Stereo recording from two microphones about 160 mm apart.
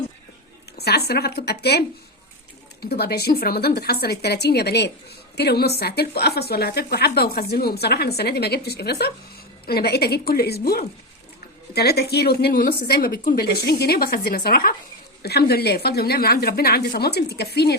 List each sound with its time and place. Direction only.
0.8 s a woman's voice: 85° left
2.8 s a woman's voice: 80° left
9.6 s a woman's voice: 80° left
11.7 s a woman's voice: 90° left
13.7 s a woman's voice: 90° left; by 14.8 s 70° left (ahead or behind)
15.2 s a woman's voice: 85° left